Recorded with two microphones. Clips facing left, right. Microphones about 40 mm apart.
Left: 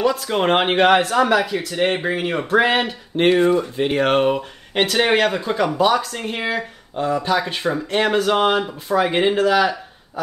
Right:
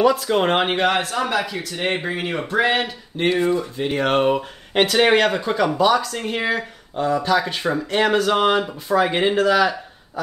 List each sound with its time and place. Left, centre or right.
0.0 s speech: centre
0.6 s speech: centre
2.5 s speech: left
3.9 s speech: centre